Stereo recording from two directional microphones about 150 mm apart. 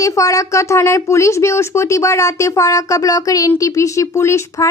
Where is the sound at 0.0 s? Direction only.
20° left (ahead or behind).